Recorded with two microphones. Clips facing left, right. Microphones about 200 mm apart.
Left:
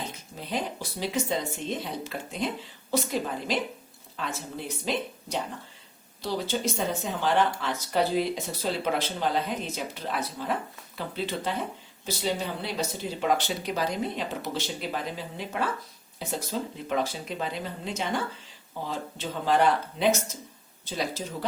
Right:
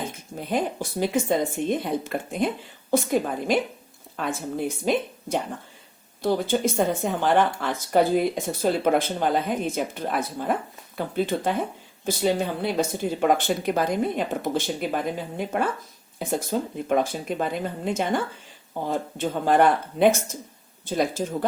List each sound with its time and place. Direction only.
0.0 s speech: 50° right (ahead or behind)